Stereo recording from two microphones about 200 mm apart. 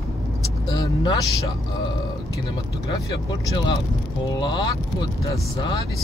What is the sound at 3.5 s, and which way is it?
Speech, 25° left (ahead or behind).